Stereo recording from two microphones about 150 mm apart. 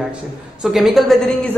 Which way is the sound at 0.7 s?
Centre (ahead or behind).